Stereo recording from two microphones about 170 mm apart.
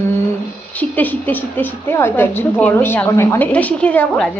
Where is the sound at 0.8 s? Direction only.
10° left (ahead or behind).